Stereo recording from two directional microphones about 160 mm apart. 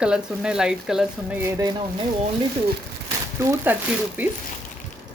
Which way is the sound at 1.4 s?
20° right (ahead or behind).